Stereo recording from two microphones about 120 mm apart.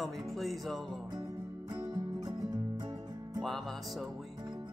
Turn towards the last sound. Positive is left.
turn(degrees=0)  # may be behind; listen again after turning